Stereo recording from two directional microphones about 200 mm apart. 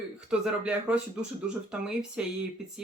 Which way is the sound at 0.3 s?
5° right (ahead or behind).